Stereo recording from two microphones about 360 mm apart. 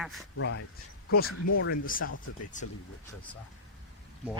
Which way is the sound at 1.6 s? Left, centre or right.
Left.